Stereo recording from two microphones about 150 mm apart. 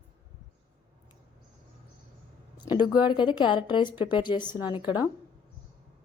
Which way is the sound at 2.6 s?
30° left (ahead or behind).